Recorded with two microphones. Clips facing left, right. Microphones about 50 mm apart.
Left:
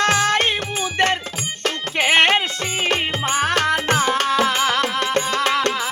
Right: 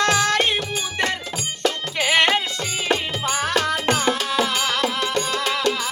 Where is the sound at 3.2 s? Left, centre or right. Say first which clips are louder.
Left 3 dB; left.